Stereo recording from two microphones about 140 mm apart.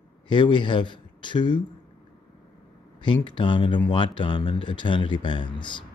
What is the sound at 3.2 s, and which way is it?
Speech, 35° left (ahead or behind).